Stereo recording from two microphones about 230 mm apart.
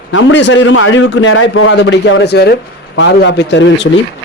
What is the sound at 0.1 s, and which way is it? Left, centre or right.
A man's voice, left.